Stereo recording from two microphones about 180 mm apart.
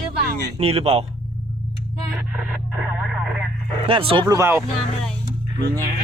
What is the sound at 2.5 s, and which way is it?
Speech, 5° right (ahead or behind).